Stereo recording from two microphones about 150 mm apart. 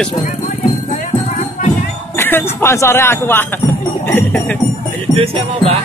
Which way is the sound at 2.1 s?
15° left (ahead or behind).